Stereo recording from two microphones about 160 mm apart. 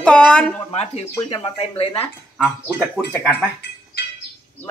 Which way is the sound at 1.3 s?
35° left (ahead or behind).